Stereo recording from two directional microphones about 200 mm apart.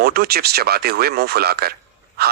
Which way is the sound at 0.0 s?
50° right (ahead or behind).